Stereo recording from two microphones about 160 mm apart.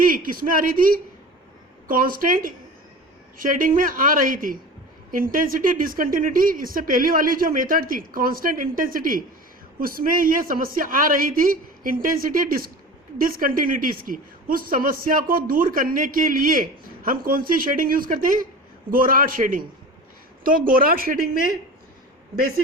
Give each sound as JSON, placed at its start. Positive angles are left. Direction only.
{"t": 0.0, "sound": "a woman's voice", "side_deg": -60}
{"t": 1.9, "sound": "a woman's voice", "side_deg": -60}
{"t": 22.4, "sound": "a woman's voice", "side_deg": -65}